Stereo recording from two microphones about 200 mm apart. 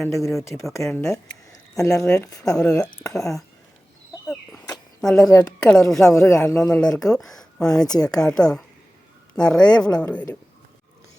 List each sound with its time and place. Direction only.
0.2 s speech: centre (ahead or behind)
2.4 s speech: 5° left (ahead or behind)
2.6 s speech: 15° left (ahead or behind)
4.9 s speech: 5° left (ahead or behind)
6.1 s speech: 15° left (ahead or behind)